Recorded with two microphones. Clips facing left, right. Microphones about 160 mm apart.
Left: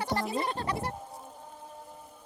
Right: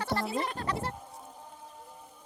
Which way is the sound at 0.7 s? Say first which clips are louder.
Left 1 dB; 15° left (ahead or behind).